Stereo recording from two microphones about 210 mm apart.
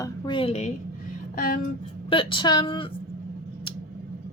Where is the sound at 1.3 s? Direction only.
40° left (ahead or behind).